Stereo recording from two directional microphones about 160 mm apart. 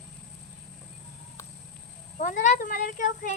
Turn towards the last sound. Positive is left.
turn(degrees=55)  # may be behind; listen again after turning